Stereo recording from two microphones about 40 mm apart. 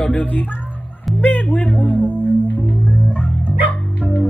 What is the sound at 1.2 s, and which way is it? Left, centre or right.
Music, left.